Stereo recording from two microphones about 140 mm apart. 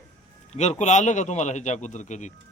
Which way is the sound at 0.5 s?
55° left (ahead or behind).